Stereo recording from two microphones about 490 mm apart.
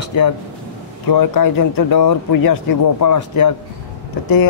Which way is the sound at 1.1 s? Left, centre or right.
Left.